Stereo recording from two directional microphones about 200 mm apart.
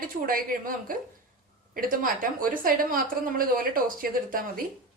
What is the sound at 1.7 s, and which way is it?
A woman's voice, 45° right (ahead or behind).